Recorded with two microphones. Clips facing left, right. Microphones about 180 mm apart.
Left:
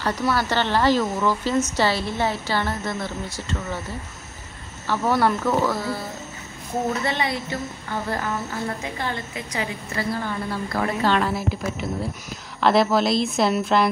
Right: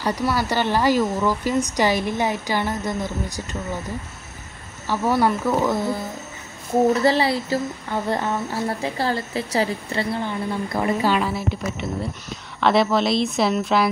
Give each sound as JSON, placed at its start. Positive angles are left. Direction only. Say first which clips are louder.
{"t": 0.0, "sound": "a woman's voice", "louder": "right 1 dB", "side_deg": -10}
{"t": 4.8, "sound": "a woman's voice", "louder": "right 1 dB", "side_deg": -10}
{"t": 6.9, "sound": "a woman's voice", "louder": "right 6 dB", "side_deg": -30}
{"t": 12.5, "sound": "speech", "louder": "even", "side_deg": 0}